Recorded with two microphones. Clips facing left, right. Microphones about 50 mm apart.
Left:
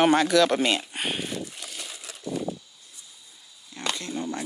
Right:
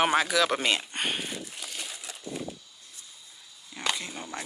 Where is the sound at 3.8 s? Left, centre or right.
Centre.